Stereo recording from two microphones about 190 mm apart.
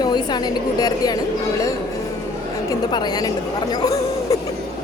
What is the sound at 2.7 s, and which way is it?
Speech, 20° left (ahead or behind).